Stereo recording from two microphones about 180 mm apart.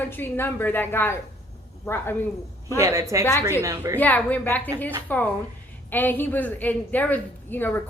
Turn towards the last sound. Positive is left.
turn(degrees=10)  # may be behind; listen again after turning